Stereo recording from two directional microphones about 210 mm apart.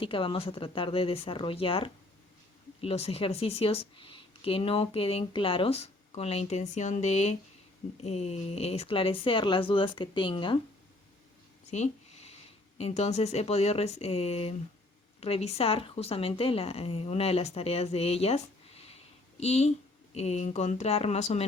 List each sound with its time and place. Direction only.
0.0 s speech: 25° left (ahead or behind)
11.7 s speech: 30° left (ahead or behind)